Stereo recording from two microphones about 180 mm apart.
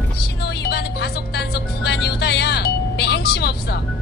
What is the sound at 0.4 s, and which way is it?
Music, 65° left (ahead or behind).